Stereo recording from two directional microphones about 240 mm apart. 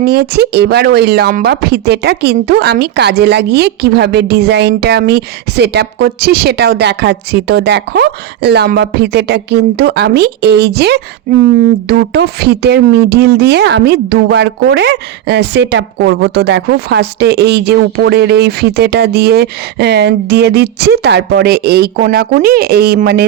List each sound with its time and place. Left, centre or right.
0.0 s speech: right